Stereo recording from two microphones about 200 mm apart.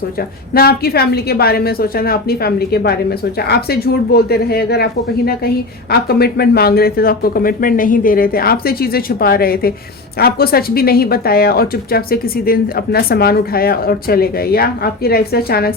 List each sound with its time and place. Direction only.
0.5 s speech: 50° left (ahead or behind)